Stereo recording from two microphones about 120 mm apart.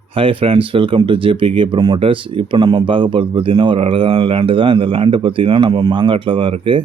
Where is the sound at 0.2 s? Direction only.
50° right (ahead or behind).